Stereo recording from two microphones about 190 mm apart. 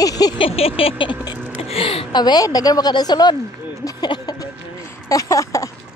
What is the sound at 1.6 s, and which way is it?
A woman's voice, 30° left (ahead or behind).